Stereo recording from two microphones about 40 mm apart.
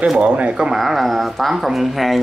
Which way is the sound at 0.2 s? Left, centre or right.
Right.